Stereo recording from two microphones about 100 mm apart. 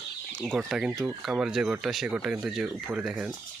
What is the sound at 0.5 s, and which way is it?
Speech, 5° right (ahead or behind).